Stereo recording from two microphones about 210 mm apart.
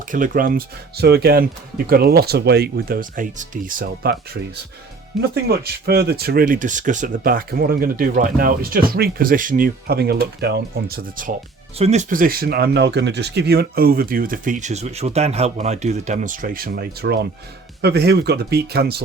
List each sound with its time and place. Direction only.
0.1 s speech: 40° right (ahead or behind)
5.3 s speech: 50° right (ahead or behind)
11.8 s speech: 35° right (ahead or behind); by 19.0 s 50° right (ahead or behind)